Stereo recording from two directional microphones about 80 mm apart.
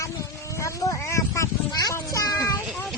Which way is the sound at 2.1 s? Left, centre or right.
Left.